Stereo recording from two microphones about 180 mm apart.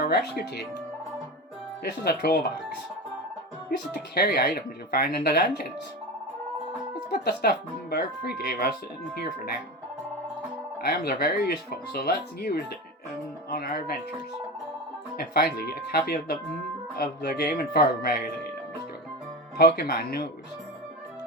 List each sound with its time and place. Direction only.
0.0 s speech: 60° left (ahead or behind)
1.8 s speech: 60° left (ahead or behind)
4.1 s speech: 60° left (ahead or behind)
7.1 s speech: 60° left (ahead or behind)
10.8 s speech: 55° left (ahead or behind)
15.2 s speech: 60° left (ahead or behind)
19.5 s speech: 65° left (ahead or behind)